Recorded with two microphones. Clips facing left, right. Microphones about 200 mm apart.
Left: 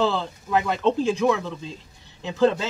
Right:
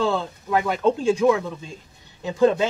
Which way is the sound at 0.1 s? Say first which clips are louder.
Right 1 dB; 5° right (ahead or behind).